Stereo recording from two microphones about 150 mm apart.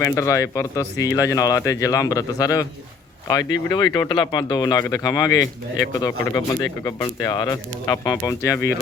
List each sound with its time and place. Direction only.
0.0 s speech: 20° left (ahead or behind)